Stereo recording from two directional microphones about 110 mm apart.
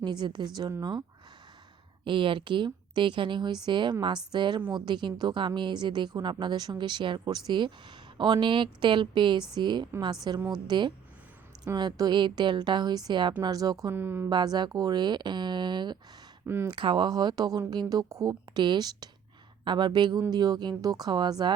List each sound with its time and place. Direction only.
0.0 s speech: 40° right (ahead or behind)
2.0 s speech: 50° right (ahead or behind)
13.9 s speech: 20° right (ahead or behind)
14.3 s speech: 40° right (ahead or behind)
16.5 s speech: 20° right (ahead or behind)
16.7 s speech: 45° right (ahead or behind)